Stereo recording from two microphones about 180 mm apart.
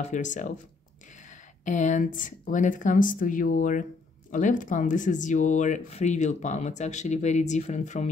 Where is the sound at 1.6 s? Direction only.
45° left (ahead or behind).